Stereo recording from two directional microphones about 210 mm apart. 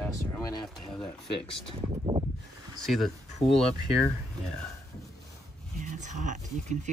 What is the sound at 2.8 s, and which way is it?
Speech, centre (ahead or behind).